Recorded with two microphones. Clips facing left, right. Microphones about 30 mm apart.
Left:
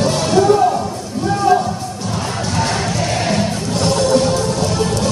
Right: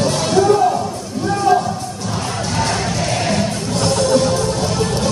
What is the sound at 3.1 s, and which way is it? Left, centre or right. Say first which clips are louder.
Music: left 1 dB; centre.